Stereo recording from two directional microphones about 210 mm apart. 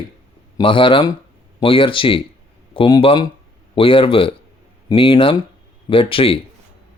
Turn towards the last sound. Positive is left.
turn(degrees=25)  # may be behind; listen again after turning